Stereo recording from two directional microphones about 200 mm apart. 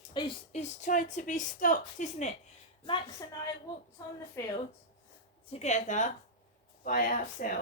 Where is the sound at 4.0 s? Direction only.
15° left (ahead or behind).